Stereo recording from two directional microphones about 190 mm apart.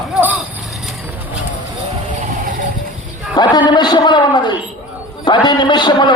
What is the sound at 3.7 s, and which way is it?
A man's voice, 25° left (ahead or behind).